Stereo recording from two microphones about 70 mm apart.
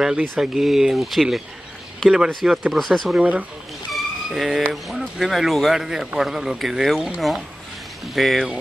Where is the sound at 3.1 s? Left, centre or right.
Centre.